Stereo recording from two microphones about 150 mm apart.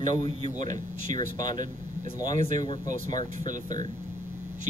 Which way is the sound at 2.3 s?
55° right (ahead or behind).